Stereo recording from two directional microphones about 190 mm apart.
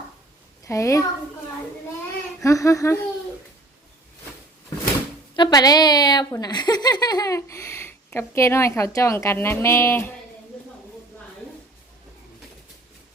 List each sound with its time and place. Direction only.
0.6 s a woman's voice: 15° left (ahead or behind)
2.4 s speech: 15° left (ahead or behind)
5.4 s speech: 20° left (ahead or behind)